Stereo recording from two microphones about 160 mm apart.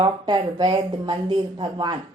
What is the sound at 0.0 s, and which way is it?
Speech, 30° right (ahead or behind).